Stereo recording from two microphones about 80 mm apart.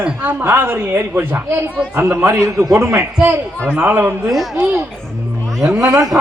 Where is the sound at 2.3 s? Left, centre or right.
Right.